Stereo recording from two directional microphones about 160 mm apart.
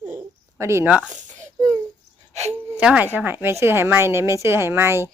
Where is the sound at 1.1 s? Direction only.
50° right (ahead or behind).